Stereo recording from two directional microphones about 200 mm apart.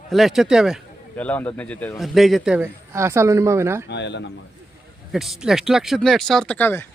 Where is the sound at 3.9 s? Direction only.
60° left (ahead or behind).